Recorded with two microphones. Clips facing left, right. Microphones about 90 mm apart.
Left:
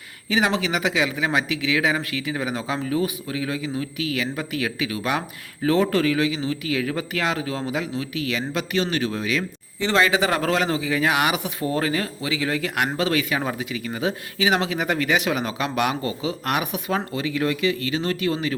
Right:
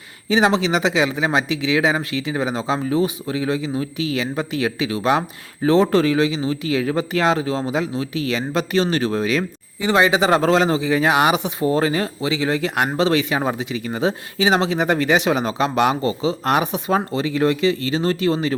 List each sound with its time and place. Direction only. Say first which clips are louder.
0.3 s speech: right 5 dB; 25° right (ahead or behind)
9.8 s speech: right 3 dB; 20° right (ahead or behind)